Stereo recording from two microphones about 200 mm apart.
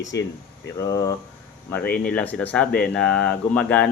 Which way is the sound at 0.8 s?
20° left (ahead or behind).